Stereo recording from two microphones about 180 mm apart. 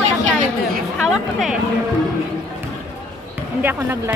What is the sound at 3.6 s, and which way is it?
Speech, 10° right (ahead or behind).